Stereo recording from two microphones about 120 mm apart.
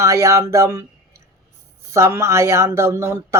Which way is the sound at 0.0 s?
25° right (ahead or behind).